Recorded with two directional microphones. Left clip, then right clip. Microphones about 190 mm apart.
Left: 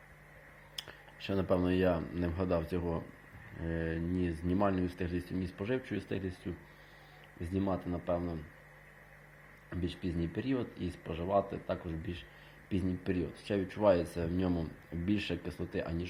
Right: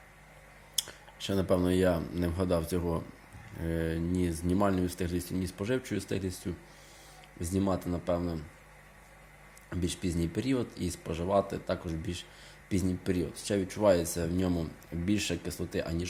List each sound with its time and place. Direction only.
0.8 s speech: 25° right (ahead or behind)
9.6 s speech: 35° right (ahead or behind)